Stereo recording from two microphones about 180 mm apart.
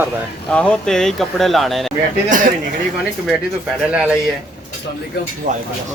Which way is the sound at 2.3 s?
45° right (ahead or behind).